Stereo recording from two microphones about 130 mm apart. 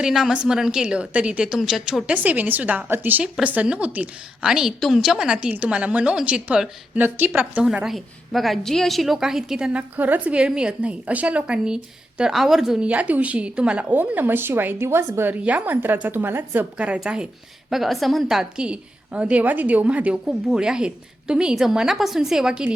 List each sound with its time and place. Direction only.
0.0 s a woman's voice: 5° right (ahead or behind)